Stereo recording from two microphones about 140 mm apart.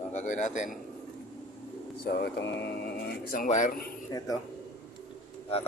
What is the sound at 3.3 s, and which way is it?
Speech, 70° left (ahead or behind).